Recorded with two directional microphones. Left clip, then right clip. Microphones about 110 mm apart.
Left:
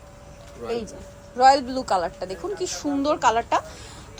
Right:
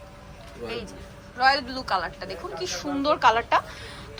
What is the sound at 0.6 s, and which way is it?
Speech, 5° left (ahead or behind).